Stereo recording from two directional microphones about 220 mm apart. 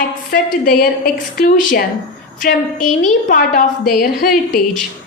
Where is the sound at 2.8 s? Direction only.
35° left (ahead or behind).